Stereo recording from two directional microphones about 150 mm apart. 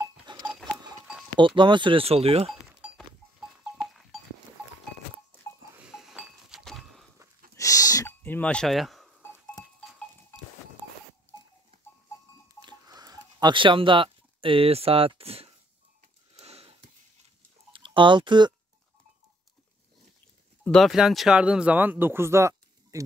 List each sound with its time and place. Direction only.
0.3 s goat: 30° right (ahead or behind)
1.3 s speech: 35° right (ahead or behind)
3.3 s livestock: 5° right (ahead or behind)
5.8 s a sound: 5° right (ahead or behind)
6.6 s vehicle: centre (ahead or behind)
7.5 s a sound: 20° left (ahead or behind); by 9.1 s centre (ahead or behind)
12.6 s a sound: 25° right (ahead or behind); by 15.5 s 40° right (ahead or behind)
16.3 s sniff: 40° right (ahead or behind)
17.7 s speech: 35° right (ahead or behind)
20.6 s speech: centre (ahead or behind); by 23.0 s 20° right (ahead or behind)